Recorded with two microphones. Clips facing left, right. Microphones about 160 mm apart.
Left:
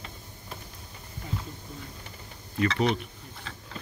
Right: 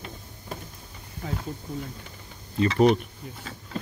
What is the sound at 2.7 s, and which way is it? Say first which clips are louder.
Speech: right 9 dB; 45° right (ahead or behind).